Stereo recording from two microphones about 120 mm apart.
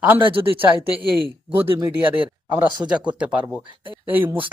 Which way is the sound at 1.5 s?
20° right (ahead or behind).